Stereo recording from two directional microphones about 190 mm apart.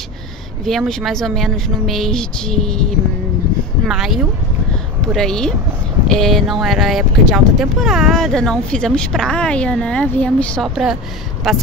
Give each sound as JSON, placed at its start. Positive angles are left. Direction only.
{"t": 0.7, "sound": "speech", "side_deg": 0}